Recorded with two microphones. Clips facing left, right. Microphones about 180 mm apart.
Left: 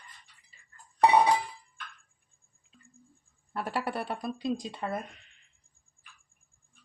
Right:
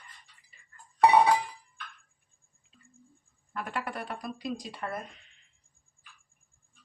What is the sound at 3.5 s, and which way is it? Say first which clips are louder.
Speech: left 3 dB; 35° left (ahead or behind).